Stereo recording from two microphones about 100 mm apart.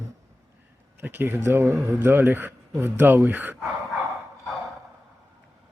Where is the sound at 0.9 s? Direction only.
20° right (ahead or behind).